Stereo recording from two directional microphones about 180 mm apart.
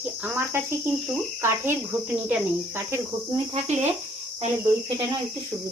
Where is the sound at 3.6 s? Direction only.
40° right (ahead or behind).